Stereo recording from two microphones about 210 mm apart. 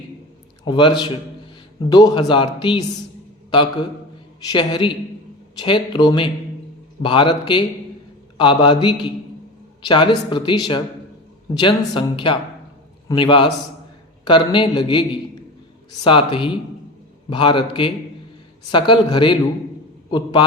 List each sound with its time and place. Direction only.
0.6 s speech: 20° left (ahead or behind)
4.4 s speech: 20° left (ahead or behind)
16.0 s a man's voice: 25° left (ahead or behind)